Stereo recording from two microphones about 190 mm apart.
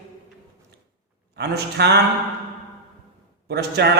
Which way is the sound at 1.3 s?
60° right (ahead or behind).